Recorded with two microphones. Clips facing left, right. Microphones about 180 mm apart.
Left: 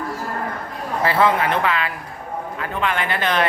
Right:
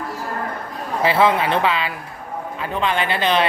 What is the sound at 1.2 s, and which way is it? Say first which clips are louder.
Speech: right 1 dB; 25° right (ahead or behind).